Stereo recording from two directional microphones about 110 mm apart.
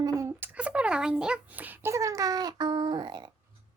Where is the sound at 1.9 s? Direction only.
30° right (ahead or behind).